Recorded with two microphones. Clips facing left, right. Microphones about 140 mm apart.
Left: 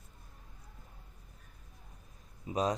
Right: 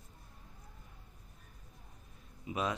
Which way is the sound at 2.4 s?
40° left (ahead or behind).